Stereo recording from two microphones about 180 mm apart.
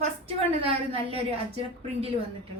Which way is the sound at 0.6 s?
30° right (ahead or behind).